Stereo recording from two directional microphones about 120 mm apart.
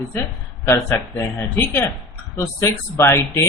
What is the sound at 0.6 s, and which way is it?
Speech, 20° left (ahead or behind).